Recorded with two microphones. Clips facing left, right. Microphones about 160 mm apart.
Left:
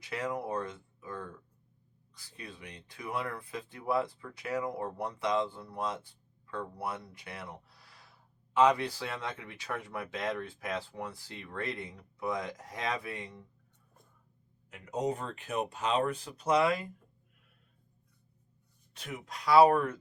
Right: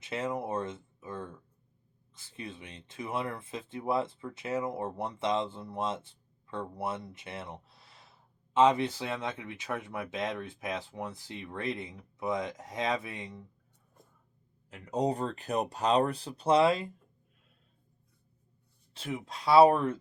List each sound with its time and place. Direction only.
0.0 s speech: 25° right (ahead or behind)
14.7 s speech: 30° right (ahead or behind)
18.9 s speech: 25° right (ahead or behind)